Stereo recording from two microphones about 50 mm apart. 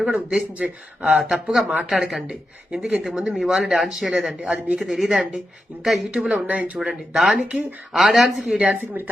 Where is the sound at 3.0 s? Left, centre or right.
Centre.